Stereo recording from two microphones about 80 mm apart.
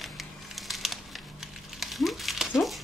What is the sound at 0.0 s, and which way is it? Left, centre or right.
Crumpling, centre.